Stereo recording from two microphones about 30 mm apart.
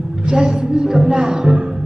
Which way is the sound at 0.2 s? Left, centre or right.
Right.